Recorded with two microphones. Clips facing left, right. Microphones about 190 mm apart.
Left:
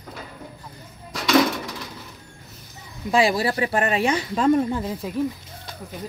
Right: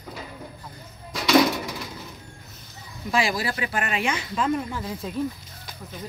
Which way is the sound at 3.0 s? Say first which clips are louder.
Left 5 dB; 30° left (ahead or behind).